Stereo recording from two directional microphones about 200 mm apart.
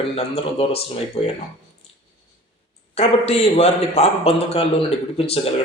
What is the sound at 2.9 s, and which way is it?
A man's voice, 30° left (ahead or behind).